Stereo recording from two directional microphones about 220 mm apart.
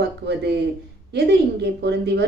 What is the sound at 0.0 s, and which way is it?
A woman's voice, 50° right (ahead or behind).